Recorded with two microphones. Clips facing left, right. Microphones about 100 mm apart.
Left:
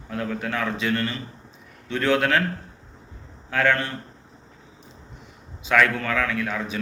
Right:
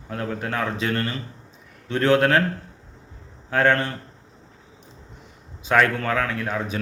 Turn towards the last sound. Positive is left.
turn(degrees=-35)  # may be behind; listen again after turning